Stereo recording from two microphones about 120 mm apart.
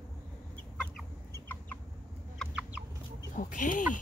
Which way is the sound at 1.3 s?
15° left (ahead or behind).